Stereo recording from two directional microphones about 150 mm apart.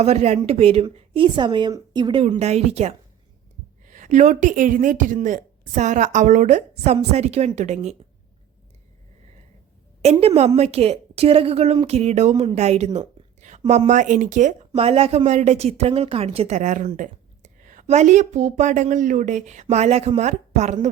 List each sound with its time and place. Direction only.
0.0 s speech: 45° right (ahead or behind); by 2.2 s 30° right (ahead or behind)
2.4 s speech: 45° right (ahead or behind)
3.8 s speech: 60° right (ahead or behind)
10.0 s speech: 45° right (ahead or behind)
12.5 s a sound: 45° right (ahead or behind)
13.7 s speech: 50° right (ahead or behind)
14.8 s speech: 40° right (ahead or behind)